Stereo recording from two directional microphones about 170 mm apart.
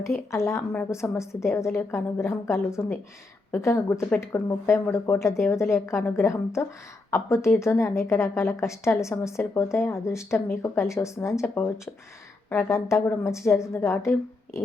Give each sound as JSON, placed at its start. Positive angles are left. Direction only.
{"t": 0.0, "sound": "a woman's voice", "side_deg": 15}